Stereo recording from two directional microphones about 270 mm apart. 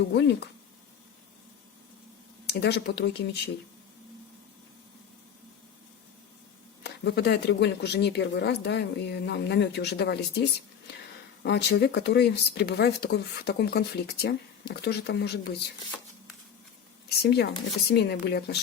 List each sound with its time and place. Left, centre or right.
0.0 s speech: left
2.5 s speech: left
6.8 s speech: left
11.4 s speech: left
17.2 s speech: left